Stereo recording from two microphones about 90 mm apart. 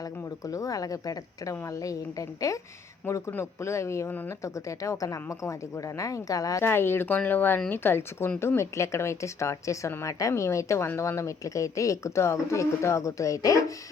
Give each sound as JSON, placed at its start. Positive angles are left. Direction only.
{"t": 0.4, "sound": "speech", "side_deg": 40}
{"t": 4.1, "sound": "speech", "side_deg": 20}
{"t": 4.4, "sound": "speech", "side_deg": 35}
{"t": 6.7, "sound": "speech", "side_deg": 25}